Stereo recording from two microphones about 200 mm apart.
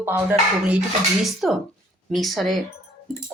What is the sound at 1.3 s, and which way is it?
Speech, centre (ahead or behind).